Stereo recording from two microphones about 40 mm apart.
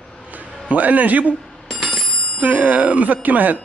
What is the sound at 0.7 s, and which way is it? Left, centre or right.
Speech, right.